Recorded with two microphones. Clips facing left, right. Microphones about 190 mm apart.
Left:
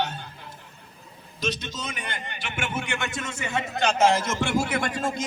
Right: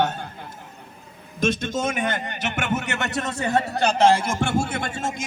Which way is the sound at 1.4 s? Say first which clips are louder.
Right 8 dB; 50° right (ahead or behind).